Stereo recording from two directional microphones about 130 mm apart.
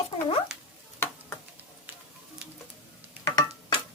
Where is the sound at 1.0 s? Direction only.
15° left (ahead or behind).